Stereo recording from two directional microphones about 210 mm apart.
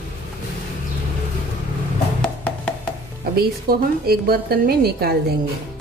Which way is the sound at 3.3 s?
45° right (ahead or behind).